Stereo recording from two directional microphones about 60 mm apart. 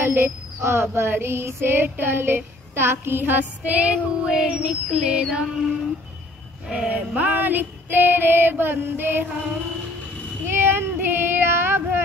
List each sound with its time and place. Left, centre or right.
0.0 s child singing: right
4.3 s female singing: centre
6.7 s child singing: centre; by 9.3 s right
10.4 s child singing: right